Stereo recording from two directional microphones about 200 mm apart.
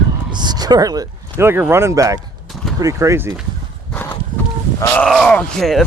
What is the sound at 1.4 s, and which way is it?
Speech, 10° right (ahead or behind).